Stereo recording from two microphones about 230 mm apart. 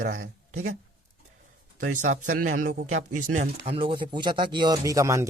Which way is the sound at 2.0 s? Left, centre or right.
Right.